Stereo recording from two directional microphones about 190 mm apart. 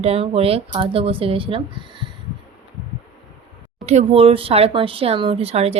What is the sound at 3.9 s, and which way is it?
Speech, 35° right (ahead or behind).